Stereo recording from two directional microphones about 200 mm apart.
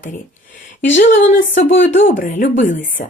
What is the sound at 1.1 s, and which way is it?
Speech, 65° left (ahead or behind).